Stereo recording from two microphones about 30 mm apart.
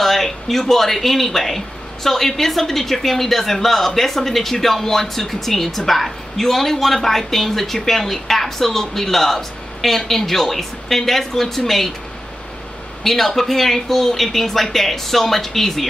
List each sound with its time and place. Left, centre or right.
0.0 s speech: centre
13.0 s speech: centre